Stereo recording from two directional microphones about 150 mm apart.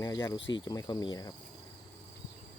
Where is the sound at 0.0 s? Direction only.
25° left (ahead or behind).